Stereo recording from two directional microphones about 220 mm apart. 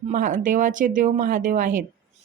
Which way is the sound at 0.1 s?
35° right (ahead or behind).